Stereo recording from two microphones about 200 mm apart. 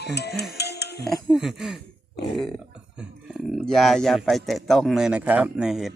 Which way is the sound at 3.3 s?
Centre (ahead or behind).